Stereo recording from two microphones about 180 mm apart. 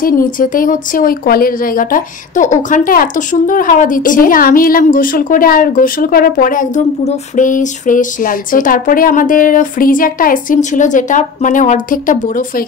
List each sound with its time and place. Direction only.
0.0 s speech: 50° left (ahead or behind)